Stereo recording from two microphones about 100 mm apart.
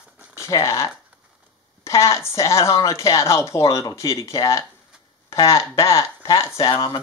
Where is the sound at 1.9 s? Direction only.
30° left (ahead or behind).